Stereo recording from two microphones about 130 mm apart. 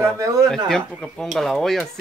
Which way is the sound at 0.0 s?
25° right (ahead or behind).